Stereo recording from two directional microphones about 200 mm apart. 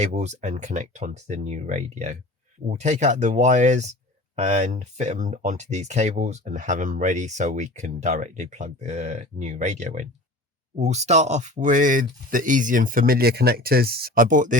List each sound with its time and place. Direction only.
0.0 s speech: 35° right (ahead or behind)